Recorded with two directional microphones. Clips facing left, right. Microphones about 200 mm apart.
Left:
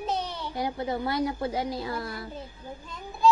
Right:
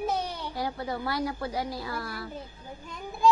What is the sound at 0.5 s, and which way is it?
A woman's voice, 20° left (ahead or behind).